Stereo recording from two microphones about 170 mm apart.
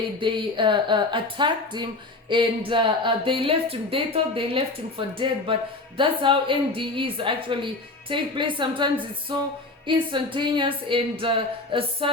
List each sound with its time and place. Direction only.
0.2 s speech: 30° right (ahead or behind)